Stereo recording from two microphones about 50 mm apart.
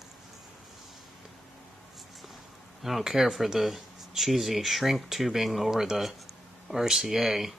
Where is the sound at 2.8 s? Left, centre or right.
Centre.